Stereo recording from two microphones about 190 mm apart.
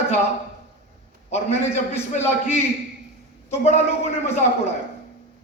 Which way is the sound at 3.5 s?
35° left (ahead or behind).